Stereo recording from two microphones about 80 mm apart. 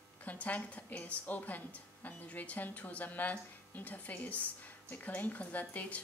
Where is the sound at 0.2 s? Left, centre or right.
Centre.